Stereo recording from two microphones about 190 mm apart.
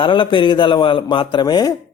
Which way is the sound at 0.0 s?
25° left (ahead or behind).